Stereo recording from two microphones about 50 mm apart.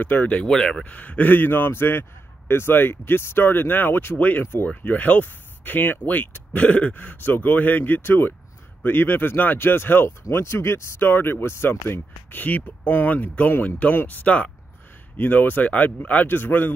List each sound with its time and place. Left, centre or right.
0.0 s speech: left
0.5 s speech: centre
0.8 s a man's voice: left
15.1 s speech: left